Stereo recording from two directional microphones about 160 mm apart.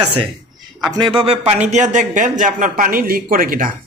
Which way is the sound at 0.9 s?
30° right (ahead or behind).